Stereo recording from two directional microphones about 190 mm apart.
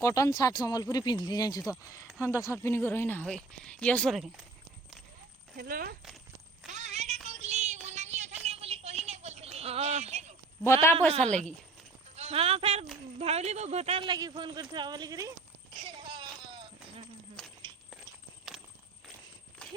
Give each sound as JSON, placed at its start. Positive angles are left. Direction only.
{"t": 0.0, "sound": "speech", "side_deg": 15}
{"t": 5.5, "sound": "speech", "side_deg": -50}
{"t": 6.7, "sound": "a sound", "side_deg": -40}
{"t": 10.6, "sound": "speech", "side_deg": 15}
{"t": 11.1, "sound": "a woman's voice", "side_deg": -35}
{"t": 15.7, "sound": "a sound", "side_deg": -25}
{"t": 18.5, "sound": "walk", "side_deg": 0}